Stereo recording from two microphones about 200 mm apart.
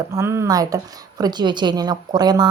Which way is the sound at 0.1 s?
15° right (ahead or behind).